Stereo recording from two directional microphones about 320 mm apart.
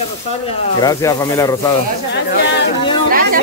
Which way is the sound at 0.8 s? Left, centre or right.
Centre.